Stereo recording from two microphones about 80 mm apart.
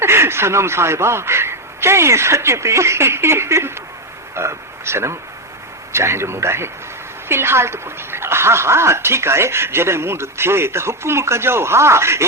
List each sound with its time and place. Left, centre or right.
0.0 s speech: right